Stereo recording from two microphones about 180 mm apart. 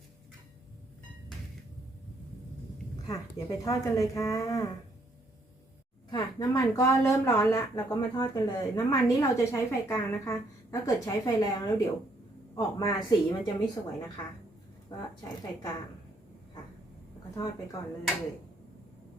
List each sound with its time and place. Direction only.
3.1 s a woman's voice: 20° left (ahead or behind)
6.1 s a woman's voice: 20° left (ahead or behind)
17.3 s a woman's voice: 20° left (ahead or behind)